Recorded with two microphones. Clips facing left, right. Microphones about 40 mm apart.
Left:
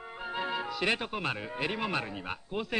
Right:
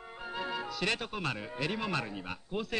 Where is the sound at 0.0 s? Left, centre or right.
Centre.